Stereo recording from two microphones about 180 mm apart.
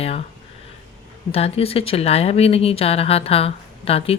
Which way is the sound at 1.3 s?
35° left (ahead or behind).